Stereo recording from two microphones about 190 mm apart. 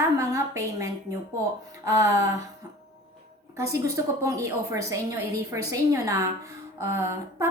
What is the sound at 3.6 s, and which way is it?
A woman's voice, 15° right (ahead or behind).